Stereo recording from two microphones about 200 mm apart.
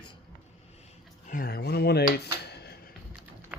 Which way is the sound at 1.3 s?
45° left (ahead or behind).